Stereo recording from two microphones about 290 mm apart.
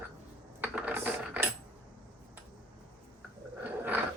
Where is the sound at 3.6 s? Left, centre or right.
Centre.